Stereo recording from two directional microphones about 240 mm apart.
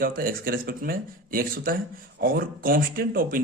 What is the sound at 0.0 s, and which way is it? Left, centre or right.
Speech, right.